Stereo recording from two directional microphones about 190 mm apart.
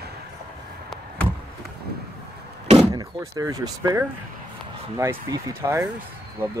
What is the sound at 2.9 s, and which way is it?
Speech, 20° right (ahead or behind).